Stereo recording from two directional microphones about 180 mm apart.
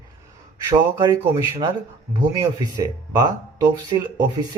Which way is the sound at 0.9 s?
15° right (ahead or behind).